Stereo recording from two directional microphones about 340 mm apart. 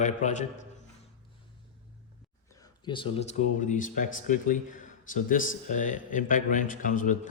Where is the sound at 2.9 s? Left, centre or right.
Centre.